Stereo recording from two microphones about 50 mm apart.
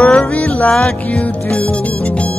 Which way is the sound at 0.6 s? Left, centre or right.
Centre.